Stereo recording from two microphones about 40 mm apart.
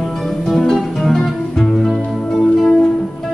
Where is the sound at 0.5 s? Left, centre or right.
Centre.